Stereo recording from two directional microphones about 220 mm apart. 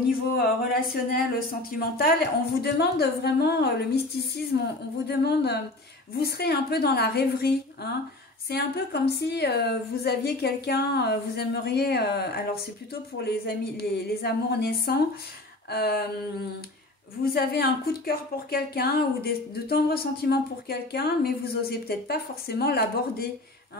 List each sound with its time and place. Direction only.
0.4 s a woman's voice: 40° left (ahead or behind)
17.2 s a woman's voice: 45° left (ahead or behind)